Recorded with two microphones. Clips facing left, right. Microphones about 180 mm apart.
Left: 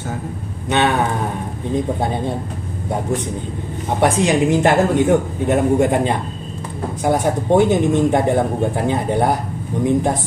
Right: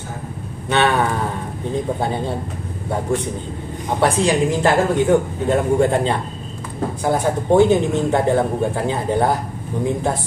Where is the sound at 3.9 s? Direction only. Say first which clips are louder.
Left 1 dB; 20° left (ahead or behind).